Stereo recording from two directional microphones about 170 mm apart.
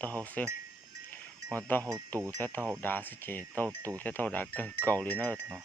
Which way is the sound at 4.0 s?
10° left (ahead or behind).